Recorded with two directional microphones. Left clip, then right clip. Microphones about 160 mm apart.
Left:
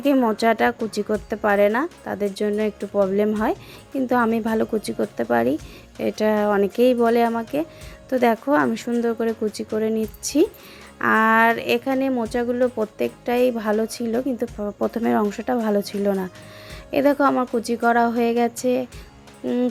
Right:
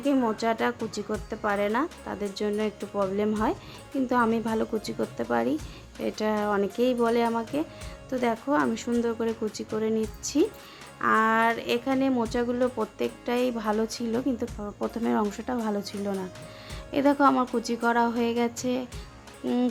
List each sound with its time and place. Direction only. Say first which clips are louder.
0.0 s speech: left 7 dB; 35° left (ahead or behind)
8.1 s speech: left 7 dB; 35° left (ahead or behind)
19.4 s speech: left 4 dB; 15° left (ahead or behind)